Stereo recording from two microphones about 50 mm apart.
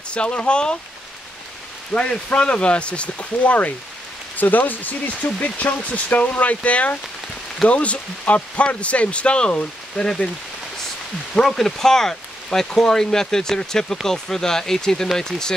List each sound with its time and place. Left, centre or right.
0.1 s speech: left
1.9 s speech: left
11.4 s speech: centre